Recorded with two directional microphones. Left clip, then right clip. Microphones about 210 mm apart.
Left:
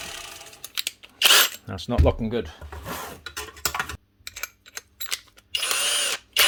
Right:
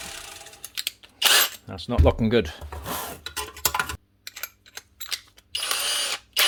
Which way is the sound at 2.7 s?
30° right (ahead or behind).